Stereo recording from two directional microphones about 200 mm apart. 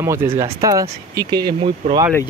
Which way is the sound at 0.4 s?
15° right (ahead or behind).